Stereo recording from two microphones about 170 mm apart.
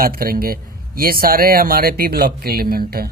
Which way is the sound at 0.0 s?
60° right (ahead or behind).